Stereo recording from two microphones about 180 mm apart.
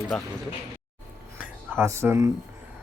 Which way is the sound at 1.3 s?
10° right (ahead or behind).